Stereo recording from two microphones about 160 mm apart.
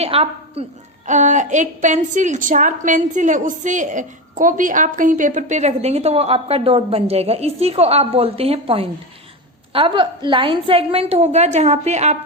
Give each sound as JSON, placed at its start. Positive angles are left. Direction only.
{"t": 0.0, "sound": "a woman's voice", "side_deg": -40}
{"t": 1.0, "sound": "a woman's voice", "side_deg": -50}